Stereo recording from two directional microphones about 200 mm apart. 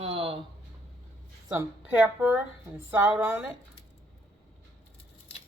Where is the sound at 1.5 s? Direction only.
10° right (ahead or behind).